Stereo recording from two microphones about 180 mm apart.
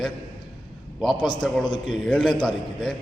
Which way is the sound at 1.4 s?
Centre (ahead or behind).